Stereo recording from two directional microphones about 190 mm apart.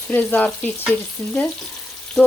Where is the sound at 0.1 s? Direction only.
10° left (ahead or behind).